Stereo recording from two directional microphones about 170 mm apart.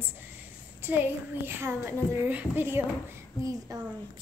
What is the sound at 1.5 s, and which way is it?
A woman's voice, 15° right (ahead or behind).